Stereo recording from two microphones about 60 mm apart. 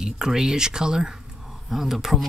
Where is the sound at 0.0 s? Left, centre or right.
Centre.